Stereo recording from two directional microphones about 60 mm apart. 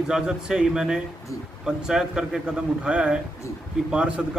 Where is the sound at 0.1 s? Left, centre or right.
Centre.